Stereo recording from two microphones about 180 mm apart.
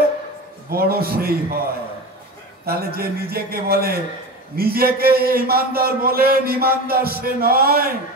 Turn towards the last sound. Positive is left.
turn(degrees=-55)  # may be behind; listen again after turning